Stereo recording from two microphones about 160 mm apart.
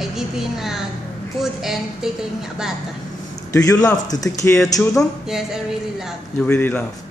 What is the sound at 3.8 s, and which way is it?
Speech, 25° left (ahead or behind).